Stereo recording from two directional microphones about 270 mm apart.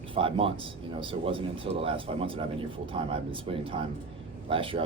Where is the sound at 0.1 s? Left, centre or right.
Centre.